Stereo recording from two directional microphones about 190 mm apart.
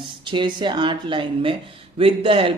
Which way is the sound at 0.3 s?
25° right (ahead or behind).